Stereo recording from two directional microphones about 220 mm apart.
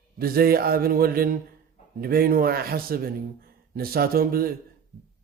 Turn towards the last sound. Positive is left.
turn(degrees=-40)  # may be behind; listen again after turning